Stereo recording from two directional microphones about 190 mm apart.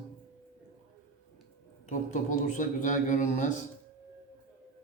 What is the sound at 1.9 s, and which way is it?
A man's voice, 40° left (ahead or behind).